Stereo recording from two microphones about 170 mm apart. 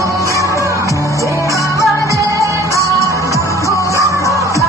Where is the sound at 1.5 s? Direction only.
20° left (ahead or behind).